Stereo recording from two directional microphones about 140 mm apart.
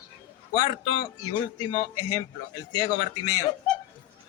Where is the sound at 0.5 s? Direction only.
35° left (ahead or behind).